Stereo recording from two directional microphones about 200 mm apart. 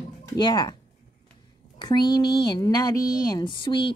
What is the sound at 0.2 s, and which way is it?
Speech, 20° left (ahead or behind).